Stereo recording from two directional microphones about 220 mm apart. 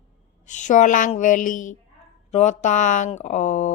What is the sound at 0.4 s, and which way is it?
Speech, 35° left (ahead or behind).